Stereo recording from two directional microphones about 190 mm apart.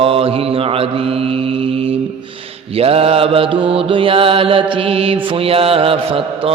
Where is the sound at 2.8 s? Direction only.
30° right (ahead or behind).